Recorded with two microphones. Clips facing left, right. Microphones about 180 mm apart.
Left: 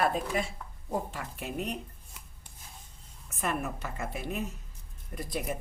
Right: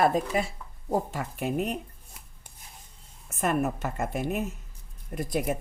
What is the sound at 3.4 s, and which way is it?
Speech, 45° right (ahead or behind).